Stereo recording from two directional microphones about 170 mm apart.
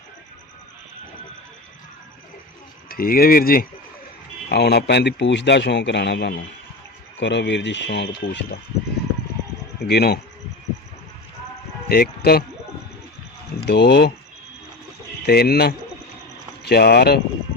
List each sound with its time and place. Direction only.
2.9 s speech: 60° left (ahead or behind)
4.4 s speech: 75° left (ahead or behind)
9.8 s speech: 70° left (ahead or behind)
11.9 s speech: 65° left (ahead or behind)
13.7 s speech: 80° left
15.3 s speech: 65° left (ahead or behind)